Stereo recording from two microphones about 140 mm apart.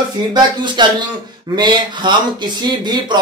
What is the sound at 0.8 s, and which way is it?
A man's voice, 35° right (ahead or behind).